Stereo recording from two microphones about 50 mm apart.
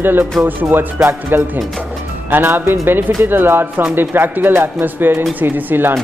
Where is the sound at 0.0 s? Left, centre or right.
Right.